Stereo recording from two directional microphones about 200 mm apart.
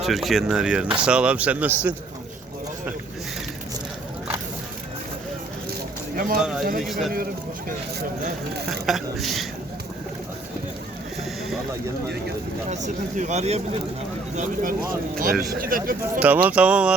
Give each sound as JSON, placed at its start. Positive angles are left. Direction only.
{"t": 0.0, "sound": "speech", "side_deg": 0}
{"t": 6.1, "sound": "speech", "side_deg": -45}
{"t": 6.4, "sound": "speech", "side_deg": 0}
{"t": 8.9, "sound": "speech", "side_deg": 0}
{"t": 12.7, "sound": "speech", "side_deg": -35}
{"t": 14.3, "sound": "speech", "side_deg": -45}
{"t": 16.2, "sound": "speech", "side_deg": -5}